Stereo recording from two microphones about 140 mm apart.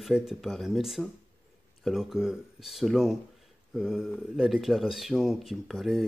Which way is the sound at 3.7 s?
5° right (ahead or behind).